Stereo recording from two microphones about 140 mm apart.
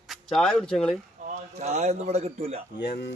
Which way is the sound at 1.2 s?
55° right (ahead or behind).